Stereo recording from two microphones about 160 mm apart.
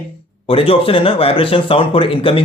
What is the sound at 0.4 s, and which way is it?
Speech, 35° left (ahead or behind).